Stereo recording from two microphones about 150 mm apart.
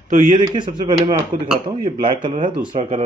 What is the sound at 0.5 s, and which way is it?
Speech, 30° right (ahead or behind).